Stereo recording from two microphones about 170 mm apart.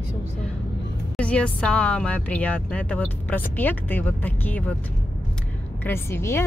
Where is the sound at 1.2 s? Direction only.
5° left (ahead or behind).